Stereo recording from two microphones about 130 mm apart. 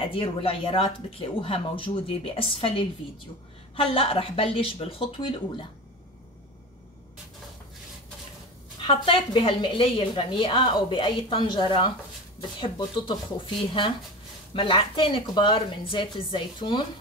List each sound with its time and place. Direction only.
0.1 s speech: 45° left (ahead or behind)
8.8 s a woman's voice: 40° left (ahead or behind)